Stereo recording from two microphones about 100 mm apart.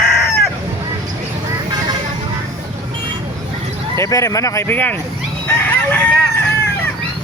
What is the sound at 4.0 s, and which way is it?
Speech, 35° left (ahead or behind).